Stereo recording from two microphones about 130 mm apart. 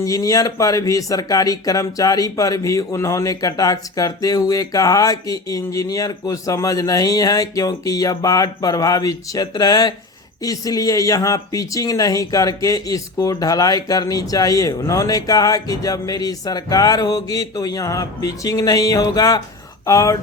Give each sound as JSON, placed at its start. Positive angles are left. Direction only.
{"t": 0.0, "sound": "speech", "side_deg": 25}